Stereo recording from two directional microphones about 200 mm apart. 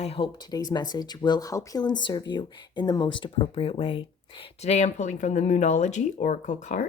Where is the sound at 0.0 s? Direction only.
25° left (ahead or behind).